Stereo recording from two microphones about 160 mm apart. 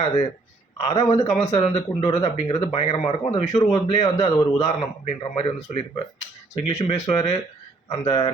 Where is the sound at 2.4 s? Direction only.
30° left (ahead or behind).